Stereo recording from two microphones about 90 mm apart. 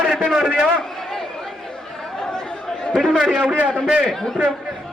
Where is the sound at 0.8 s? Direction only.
5° left (ahead or behind).